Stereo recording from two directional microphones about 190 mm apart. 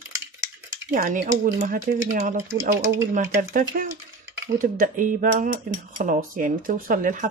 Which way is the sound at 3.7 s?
45° right (ahead or behind).